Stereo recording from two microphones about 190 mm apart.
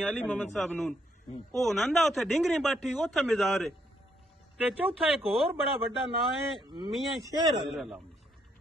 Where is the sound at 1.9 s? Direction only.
Centre (ahead or behind).